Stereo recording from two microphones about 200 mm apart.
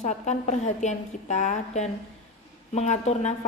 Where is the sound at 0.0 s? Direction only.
35° left (ahead or behind).